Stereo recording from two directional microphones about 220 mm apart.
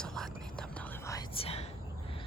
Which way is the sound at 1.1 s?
20° left (ahead or behind).